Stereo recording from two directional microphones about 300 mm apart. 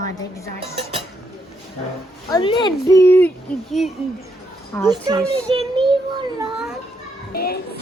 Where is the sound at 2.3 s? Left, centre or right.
Centre.